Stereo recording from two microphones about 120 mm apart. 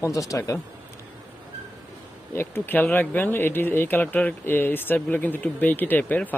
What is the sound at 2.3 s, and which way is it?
Speech, 15° left (ahead or behind).